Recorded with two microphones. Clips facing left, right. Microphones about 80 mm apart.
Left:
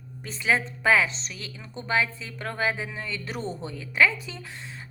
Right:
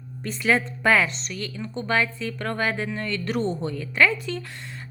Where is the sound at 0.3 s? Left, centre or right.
Centre.